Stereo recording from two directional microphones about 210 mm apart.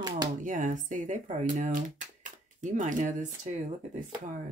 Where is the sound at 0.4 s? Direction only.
40° right (ahead or behind).